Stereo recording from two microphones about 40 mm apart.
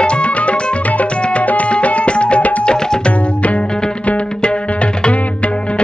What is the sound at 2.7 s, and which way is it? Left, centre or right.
Music, left.